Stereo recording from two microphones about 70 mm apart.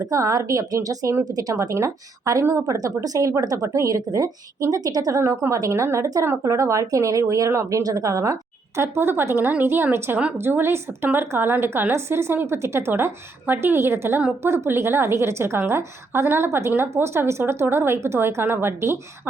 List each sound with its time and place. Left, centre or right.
0.0 s speech: right
2.4 s a woman's voice: right
2.6 s speech: right
5.2 s a woman's voice: right